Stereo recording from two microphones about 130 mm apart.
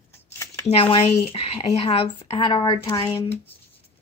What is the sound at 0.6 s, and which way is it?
A woman's voice, 50° left (ahead or behind).